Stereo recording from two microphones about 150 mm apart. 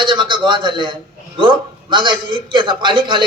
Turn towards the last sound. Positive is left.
turn(degrees=-30)  # may be behind; listen again after turning